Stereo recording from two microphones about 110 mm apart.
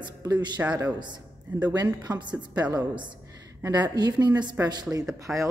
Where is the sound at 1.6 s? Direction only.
40° right (ahead or behind).